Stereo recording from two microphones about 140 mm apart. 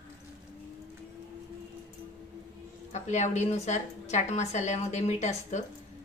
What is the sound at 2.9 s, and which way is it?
A woman's voice, 55° left (ahead or behind).